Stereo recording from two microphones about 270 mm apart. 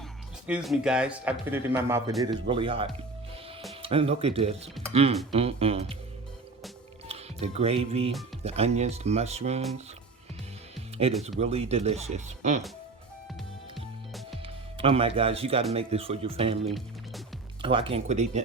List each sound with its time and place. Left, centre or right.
0.4 s speech: centre; by 6.0 s right
7.1 s speech: right
11.2 s speech: right
14.8 s speech: right